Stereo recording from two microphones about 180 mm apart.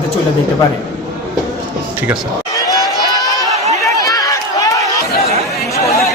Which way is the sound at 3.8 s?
20° left (ahead or behind).